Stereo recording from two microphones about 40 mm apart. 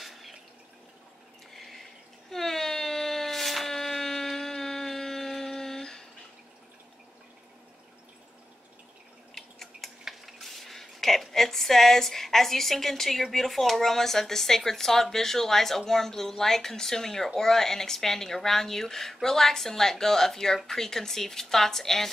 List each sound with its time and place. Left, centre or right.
0.0 s drip: centre
1.5 s water: centre
2.3 s wail: centre
9.3 s drip: centre
10.0 s a sound: centre
13.2 s speech: centre